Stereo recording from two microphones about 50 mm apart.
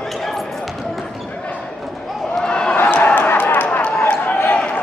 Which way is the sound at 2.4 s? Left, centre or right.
Centre.